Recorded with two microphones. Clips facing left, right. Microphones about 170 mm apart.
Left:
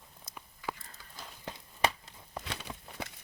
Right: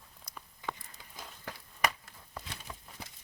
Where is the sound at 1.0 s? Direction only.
20° right (ahead or behind).